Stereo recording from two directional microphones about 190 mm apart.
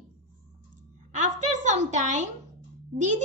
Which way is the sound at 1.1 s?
40° right (ahead or behind).